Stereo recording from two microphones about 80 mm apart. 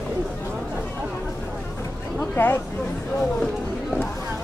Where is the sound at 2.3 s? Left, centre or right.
Left.